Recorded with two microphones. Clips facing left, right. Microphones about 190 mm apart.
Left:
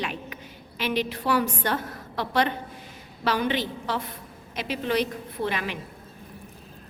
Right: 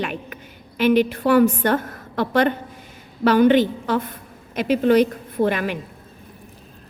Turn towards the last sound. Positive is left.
turn(degrees=-50)  # may be behind; listen again after turning